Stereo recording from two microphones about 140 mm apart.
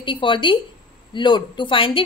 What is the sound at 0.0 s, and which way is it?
Speech, 35° left (ahead or behind).